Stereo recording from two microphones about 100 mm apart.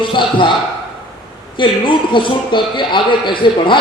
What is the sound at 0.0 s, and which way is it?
Speech, 55° left (ahead or behind).